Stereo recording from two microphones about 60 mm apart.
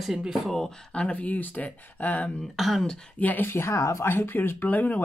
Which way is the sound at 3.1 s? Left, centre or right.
Left.